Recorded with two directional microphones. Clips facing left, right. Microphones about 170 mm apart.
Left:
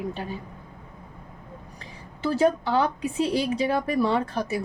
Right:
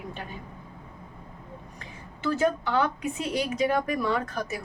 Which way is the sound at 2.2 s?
35° left (ahead or behind).